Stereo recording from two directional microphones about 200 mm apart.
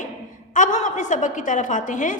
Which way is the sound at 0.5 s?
40° left (ahead or behind).